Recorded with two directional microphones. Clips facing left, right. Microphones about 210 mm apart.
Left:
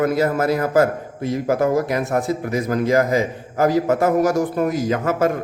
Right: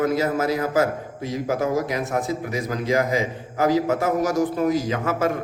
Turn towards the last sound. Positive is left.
turn(degrees=45)  # may be behind; listen again after turning